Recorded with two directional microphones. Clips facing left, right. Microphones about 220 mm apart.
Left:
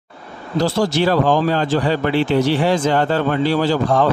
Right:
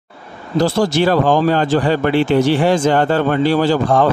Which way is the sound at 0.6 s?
50° right (ahead or behind).